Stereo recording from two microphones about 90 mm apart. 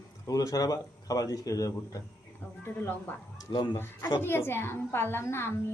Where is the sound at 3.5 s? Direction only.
55° left (ahead or behind).